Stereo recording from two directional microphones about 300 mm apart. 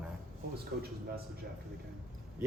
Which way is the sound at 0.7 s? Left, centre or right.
Right.